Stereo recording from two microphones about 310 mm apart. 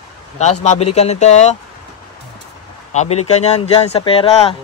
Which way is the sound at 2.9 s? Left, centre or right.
Left.